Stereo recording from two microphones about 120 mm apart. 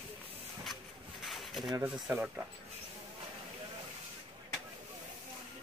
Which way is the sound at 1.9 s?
10° right (ahead or behind).